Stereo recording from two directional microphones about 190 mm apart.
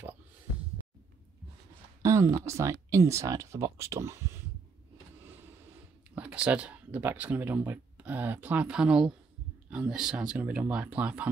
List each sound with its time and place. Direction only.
2.0 s speech: 15° right (ahead or behind)
6.1 s speech: 5° right (ahead or behind)